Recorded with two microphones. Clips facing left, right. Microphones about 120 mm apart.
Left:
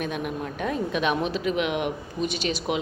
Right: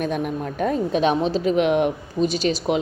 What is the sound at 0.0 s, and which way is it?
Speech, 40° right (ahead or behind).